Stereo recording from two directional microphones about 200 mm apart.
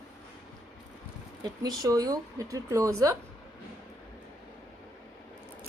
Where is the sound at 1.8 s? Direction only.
20° right (ahead or behind).